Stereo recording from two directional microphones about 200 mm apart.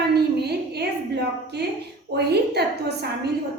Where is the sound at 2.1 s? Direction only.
55° right (ahead or behind).